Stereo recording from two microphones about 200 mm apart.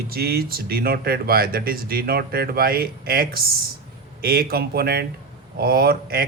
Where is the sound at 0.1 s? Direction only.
50° right (ahead or behind).